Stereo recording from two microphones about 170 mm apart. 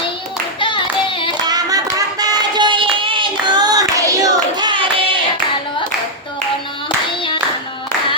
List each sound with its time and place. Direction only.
0.6 s singing: 30° left (ahead or behind)
1.5 s a sound: 20° right (ahead or behind)
6.8 s clapping: 30° left (ahead or behind)